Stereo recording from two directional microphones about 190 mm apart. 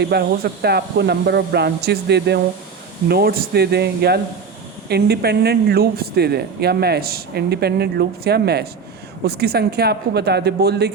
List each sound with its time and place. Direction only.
0.0 s speech: 60° right (ahead or behind)